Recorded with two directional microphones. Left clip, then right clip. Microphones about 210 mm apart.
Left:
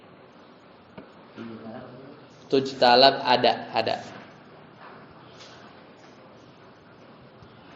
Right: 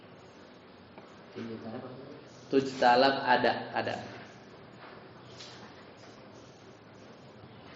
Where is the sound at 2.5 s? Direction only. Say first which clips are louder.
Left 5 dB; 35° left (ahead or behind).